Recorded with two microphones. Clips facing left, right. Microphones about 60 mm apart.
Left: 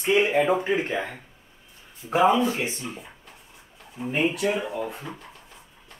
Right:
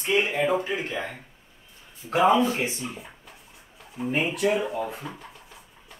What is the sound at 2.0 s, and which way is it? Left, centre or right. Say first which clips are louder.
Speech: even; centre.